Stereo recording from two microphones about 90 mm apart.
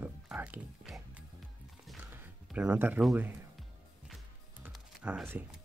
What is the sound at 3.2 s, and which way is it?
Speech, 20° right (ahead or behind).